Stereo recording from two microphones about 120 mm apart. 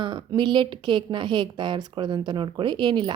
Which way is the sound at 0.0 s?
40° right (ahead or behind).